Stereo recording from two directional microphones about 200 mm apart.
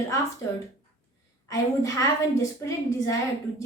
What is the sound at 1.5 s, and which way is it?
A woman's voice, 15° left (ahead or behind).